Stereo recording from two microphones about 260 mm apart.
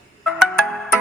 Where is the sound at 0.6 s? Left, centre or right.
Centre.